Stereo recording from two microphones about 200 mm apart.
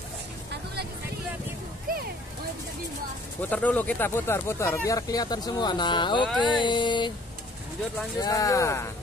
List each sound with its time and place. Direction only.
1.9 s music: 45° right (ahead or behind)
3.3 s speech: 10° left (ahead or behind); by 6.2 s 25° left (ahead or behind)
6.4 s a sound: 25° left (ahead or behind)
8.2 s speech: 15° left (ahead or behind)